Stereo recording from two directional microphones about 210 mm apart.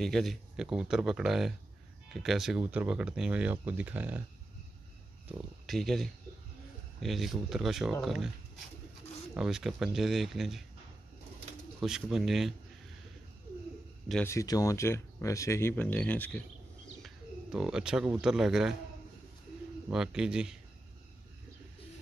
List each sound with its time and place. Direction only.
0.0 s speech: centre (ahead or behind)
5.7 s speech: centre (ahead or behind)
9.3 s speech: 5° right (ahead or behind)
11.8 s speech: centre (ahead or behind)
14.0 s a man's voice: 5° left (ahead or behind)
14.3 s speech: 15° left (ahead or behind)
17.0 s speech: 5° right (ahead or behind)
19.9 s speech: 5° right (ahead or behind)